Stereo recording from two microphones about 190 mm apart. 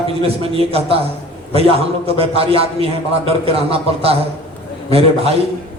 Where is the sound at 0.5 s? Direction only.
30° right (ahead or behind).